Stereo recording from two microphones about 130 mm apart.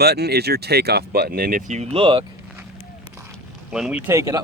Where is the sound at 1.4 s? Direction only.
80° right.